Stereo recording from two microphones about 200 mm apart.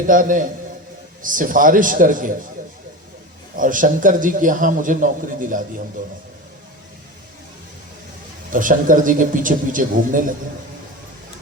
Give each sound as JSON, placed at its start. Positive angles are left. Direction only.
{"t": 0.1, "sound": "a man's voice", "side_deg": -40}
{"t": 3.5, "sound": "a man's voice", "side_deg": -40}
{"t": 8.5, "sound": "a man's voice", "side_deg": -40}